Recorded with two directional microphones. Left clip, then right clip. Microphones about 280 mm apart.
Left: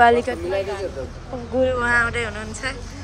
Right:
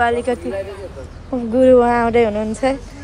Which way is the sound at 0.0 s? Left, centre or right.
Centre.